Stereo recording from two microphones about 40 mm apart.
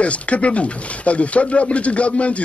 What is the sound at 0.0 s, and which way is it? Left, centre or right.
Speech, left.